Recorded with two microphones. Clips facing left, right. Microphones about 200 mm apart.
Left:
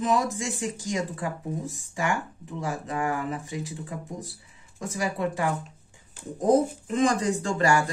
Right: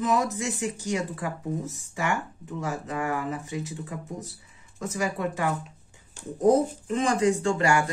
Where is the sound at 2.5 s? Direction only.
35° left (ahead or behind).